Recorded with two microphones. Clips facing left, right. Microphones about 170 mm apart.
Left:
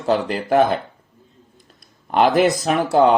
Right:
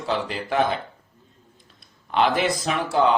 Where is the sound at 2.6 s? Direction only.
55° left (ahead or behind).